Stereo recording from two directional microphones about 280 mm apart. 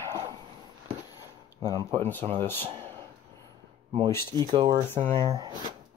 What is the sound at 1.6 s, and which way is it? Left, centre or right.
Speech, centre.